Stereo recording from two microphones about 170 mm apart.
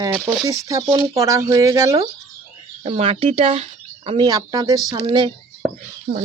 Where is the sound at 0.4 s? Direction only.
20° right (ahead or behind).